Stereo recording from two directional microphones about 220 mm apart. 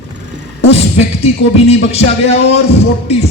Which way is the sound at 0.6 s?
30° left (ahead or behind).